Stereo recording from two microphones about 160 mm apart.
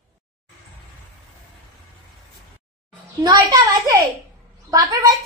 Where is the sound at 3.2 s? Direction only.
25° right (ahead or behind).